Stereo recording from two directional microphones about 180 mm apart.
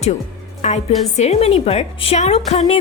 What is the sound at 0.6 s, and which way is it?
A woman's voice, 40° left (ahead or behind).